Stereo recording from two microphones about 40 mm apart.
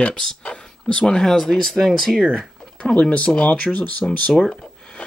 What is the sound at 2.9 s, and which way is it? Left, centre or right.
Speech, left.